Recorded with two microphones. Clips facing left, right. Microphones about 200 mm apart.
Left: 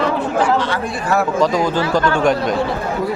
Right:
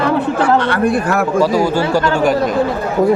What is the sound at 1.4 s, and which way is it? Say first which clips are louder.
Speech: right 2 dB; 10° right (ahead or behind).